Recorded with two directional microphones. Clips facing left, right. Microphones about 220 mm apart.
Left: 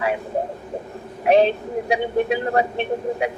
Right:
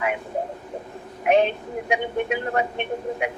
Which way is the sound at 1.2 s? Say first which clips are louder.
Left 3 dB; 35° left (ahead or behind).